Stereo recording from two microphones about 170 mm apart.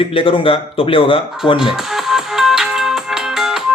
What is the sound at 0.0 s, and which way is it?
Speech, 30° left (ahead or behind).